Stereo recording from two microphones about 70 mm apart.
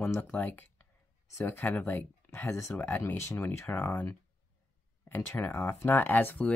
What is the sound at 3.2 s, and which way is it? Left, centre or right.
Speech, left.